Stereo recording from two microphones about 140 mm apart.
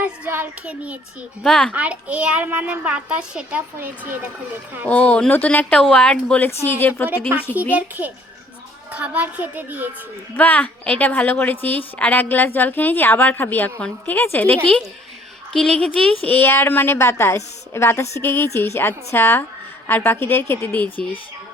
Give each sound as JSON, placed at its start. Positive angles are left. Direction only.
{"t": 0.0, "sound": "a child's voice", "side_deg": -10}
{"t": 1.5, "sound": "a woman's voice", "side_deg": 5}
{"t": 1.7, "sound": "a child's voice", "side_deg": -10}
{"t": 4.9, "sound": "a woman's voice", "side_deg": 10}
{"t": 7.7, "sound": "a child's voice", "side_deg": -10}
{"t": 10.3, "sound": "a woman's voice", "side_deg": 10}